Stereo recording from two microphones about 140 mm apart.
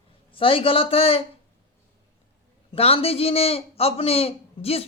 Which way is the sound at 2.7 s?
45° left (ahead or behind).